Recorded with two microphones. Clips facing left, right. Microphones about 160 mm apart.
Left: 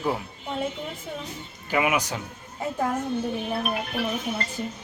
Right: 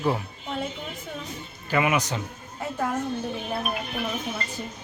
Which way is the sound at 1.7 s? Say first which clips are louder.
Even; 10° left (ahead or behind).